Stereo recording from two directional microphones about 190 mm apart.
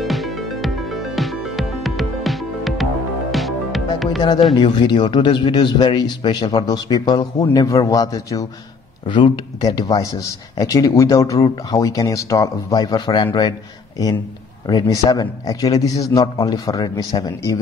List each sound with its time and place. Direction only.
0.0 s music: centre (ahead or behind)
4.2 s a man's voice: 25° left (ahead or behind)